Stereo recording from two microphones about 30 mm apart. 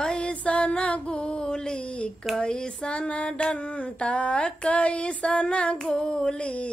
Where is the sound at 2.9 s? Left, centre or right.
Left.